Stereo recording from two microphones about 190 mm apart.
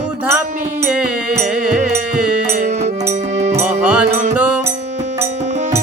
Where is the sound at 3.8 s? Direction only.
5° right (ahead or behind).